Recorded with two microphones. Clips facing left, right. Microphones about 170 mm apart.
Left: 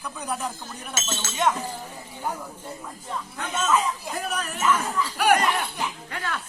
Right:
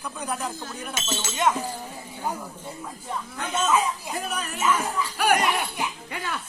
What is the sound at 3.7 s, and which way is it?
Speech, centre (ahead or behind).